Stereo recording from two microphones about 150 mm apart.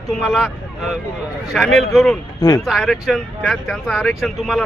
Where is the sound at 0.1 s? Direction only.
5° left (ahead or behind).